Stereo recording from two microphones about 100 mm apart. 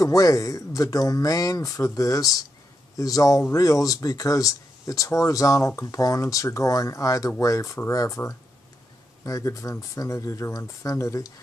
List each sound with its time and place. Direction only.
0.0 s speech: 35° left (ahead or behind)
9.2 s speech: 35° left (ahead or behind)